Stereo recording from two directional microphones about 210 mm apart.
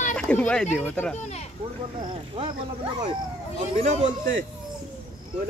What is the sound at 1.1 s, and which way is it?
Speech, 30° left (ahead or behind).